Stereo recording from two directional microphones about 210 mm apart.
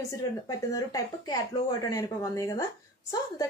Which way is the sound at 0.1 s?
15° left (ahead or behind).